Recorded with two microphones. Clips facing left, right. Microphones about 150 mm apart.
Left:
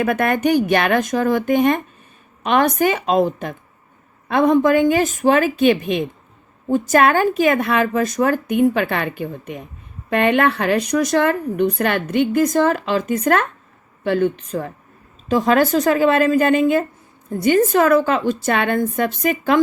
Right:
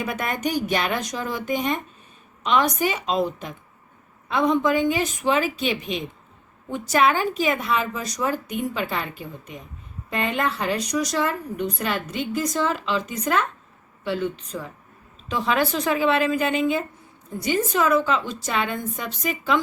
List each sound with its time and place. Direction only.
0.0 s a woman's voice: 55° left (ahead or behind)
6.7 s speech: 45° left (ahead or behind)
15.3 s a woman's voice: 45° left (ahead or behind)